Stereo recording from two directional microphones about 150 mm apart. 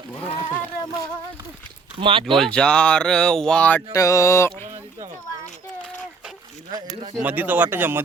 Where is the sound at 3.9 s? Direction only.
20° left (ahead or behind).